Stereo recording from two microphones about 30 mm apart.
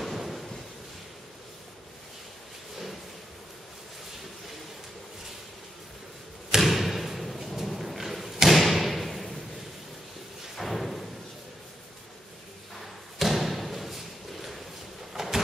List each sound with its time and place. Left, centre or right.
0.0 s a sound: centre
6.7 s slam: centre
7.5 s thump: centre
10.5 s thump: centre
13.2 s thump: centre
15.2 s a sound: centre